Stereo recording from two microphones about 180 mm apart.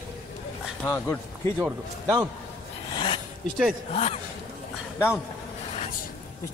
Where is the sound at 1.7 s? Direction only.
15° right (ahead or behind).